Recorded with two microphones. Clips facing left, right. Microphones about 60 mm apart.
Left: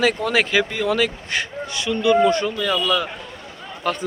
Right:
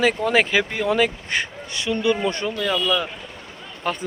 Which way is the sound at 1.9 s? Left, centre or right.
Centre.